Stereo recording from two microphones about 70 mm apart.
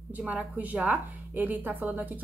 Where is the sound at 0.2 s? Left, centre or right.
Centre.